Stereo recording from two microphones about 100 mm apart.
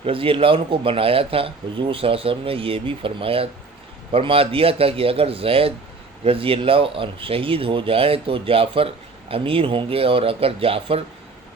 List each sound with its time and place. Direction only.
0.0 s a man's voice: 65° right (ahead or behind)